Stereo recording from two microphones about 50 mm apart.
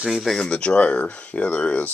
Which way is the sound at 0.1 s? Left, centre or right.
Centre.